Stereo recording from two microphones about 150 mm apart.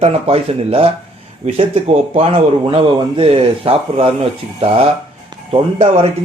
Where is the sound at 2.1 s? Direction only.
40° right (ahead or behind).